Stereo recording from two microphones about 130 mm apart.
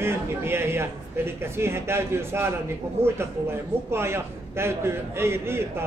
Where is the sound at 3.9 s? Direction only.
20° right (ahead or behind).